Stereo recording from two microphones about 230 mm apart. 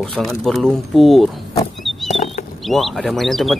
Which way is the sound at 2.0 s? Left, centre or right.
Left.